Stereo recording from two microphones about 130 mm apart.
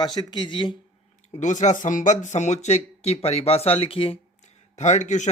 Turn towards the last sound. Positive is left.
turn(degrees=65)  # may be behind; listen again after turning